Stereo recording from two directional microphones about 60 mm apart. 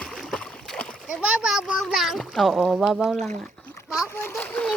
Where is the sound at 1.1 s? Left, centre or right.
Centre.